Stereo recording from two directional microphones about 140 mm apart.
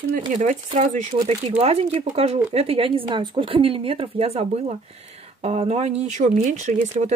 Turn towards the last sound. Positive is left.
turn(degrees=-55)  # may be behind; listen again after turning